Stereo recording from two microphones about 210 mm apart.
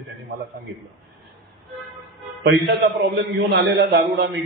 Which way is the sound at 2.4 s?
55° right (ahead or behind).